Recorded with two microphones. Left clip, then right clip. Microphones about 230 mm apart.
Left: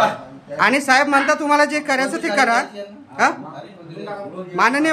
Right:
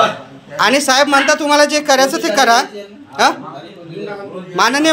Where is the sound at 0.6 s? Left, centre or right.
Centre.